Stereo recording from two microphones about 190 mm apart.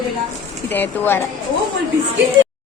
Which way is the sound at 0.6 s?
10° left (ahead or behind).